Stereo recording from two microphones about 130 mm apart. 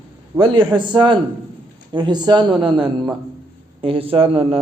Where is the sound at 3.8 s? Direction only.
45° right (ahead or behind).